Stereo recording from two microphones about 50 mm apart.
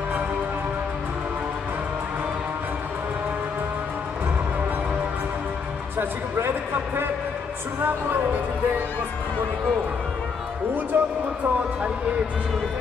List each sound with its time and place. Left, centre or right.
5.9 s speech: right
10.9 s speech: right